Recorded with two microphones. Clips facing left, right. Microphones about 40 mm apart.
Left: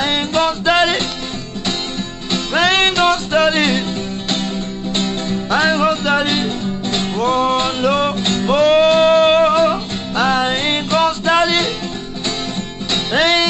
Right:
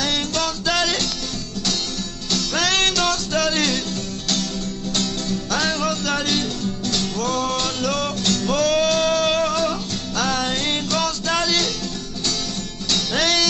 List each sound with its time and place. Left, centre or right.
0.0 s music: left
2.3 s music: left
4.9 s music: left
12.9 s music: left